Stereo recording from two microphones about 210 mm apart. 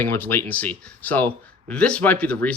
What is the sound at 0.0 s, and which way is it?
Speech, 10° left (ahead or behind).